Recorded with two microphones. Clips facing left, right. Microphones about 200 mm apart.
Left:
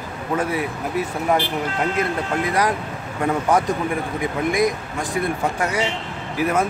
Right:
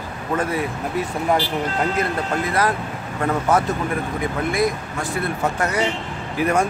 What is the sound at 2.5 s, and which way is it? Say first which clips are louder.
Speech: even; 15° left (ahead or behind).